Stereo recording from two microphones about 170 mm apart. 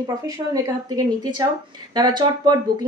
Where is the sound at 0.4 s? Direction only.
20° right (ahead or behind).